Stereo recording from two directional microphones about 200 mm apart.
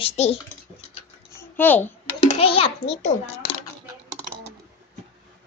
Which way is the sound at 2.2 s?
30° left (ahead or behind).